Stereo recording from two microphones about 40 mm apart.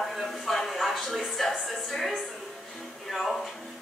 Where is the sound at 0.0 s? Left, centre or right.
Centre.